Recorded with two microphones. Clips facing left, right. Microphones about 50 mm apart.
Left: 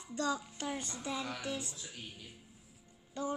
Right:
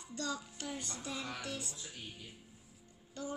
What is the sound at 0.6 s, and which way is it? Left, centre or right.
A child's voice, left.